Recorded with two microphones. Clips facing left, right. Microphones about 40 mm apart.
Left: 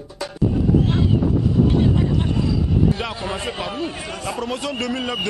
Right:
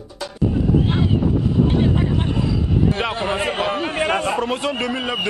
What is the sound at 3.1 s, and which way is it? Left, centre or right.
A man's voice, right.